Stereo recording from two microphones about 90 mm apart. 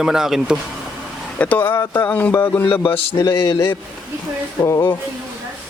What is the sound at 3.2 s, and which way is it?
Speech, 60° left (ahead or behind).